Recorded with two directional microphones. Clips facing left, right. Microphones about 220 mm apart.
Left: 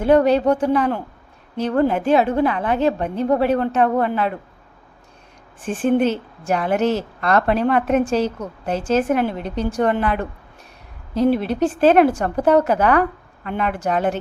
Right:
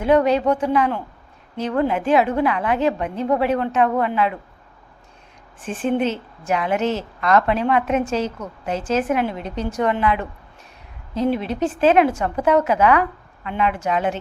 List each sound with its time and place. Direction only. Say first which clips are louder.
0.0 s a woman's voice: left 2 dB; 35° left (ahead or behind)
5.8 s a woman's voice: left 3 dB; 45° left (ahead or behind)
11.4 s a woman's voice: left 2 dB; 35° left (ahead or behind)